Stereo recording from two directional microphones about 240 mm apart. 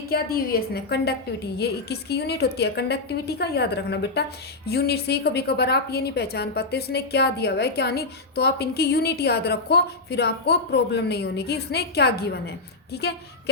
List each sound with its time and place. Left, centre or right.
0.1 s a woman's voice: left